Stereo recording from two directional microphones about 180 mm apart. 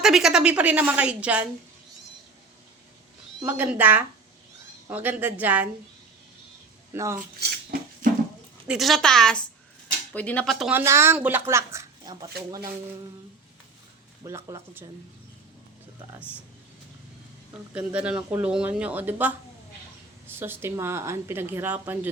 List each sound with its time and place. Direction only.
0.0 s speech: centre (ahead or behind)
3.4 s speech: 10° right (ahead or behind)
6.9 s speech: 15° right (ahead or behind)
7.7 s a sound: 50° right (ahead or behind)
8.6 s a woman's voice: 5° right (ahead or behind)
10.7 s speech: 15° right (ahead or behind)
14.3 s speech: 15° right (ahead or behind)
17.7 s speech: 5° right (ahead or behind)